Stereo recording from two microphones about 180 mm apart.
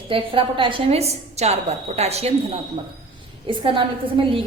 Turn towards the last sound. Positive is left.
turn(degrees=-30)  # may be behind; listen again after turning